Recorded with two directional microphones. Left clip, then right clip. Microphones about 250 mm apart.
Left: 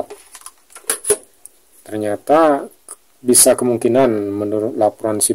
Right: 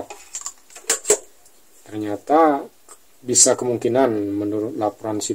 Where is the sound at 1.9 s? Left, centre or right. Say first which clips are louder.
Left 5 dB; left.